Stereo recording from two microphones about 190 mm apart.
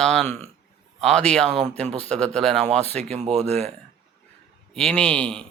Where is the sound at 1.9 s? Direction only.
35° right (ahead or behind).